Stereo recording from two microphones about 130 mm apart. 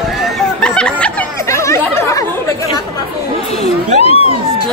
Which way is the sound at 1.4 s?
20° left (ahead or behind).